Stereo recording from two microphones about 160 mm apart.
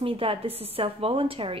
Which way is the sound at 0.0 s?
35° right (ahead or behind).